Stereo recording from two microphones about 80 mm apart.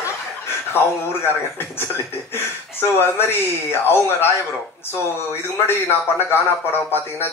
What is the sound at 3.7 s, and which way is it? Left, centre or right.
Speech, left.